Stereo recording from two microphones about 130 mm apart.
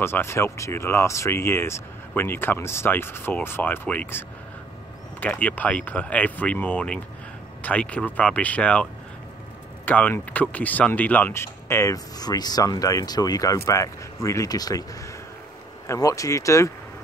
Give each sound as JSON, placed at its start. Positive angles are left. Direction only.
{"t": 0.0, "sound": "speech", "side_deg": 20}
{"t": 5.2, "sound": "speech", "side_deg": 10}
{"t": 9.8, "sound": "speech", "side_deg": 15}